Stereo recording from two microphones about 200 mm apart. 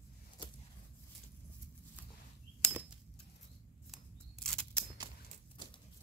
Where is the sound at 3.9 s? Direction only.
5° left (ahead or behind).